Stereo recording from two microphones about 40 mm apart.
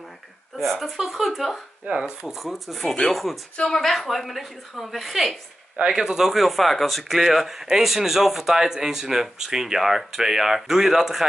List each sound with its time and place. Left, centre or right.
0.6 s speech: centre
2.0 s speech: centre
2.3 s speech: centre
3.5 s speech: centre
3.8 s speech: centre
5.9 s speech: centre